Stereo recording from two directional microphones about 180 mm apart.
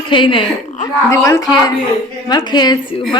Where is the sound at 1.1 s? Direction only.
15° left (ahead or behind).